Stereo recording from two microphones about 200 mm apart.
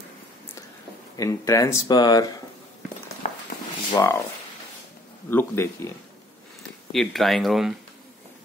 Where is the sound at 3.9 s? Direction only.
15° left (ahead or behind).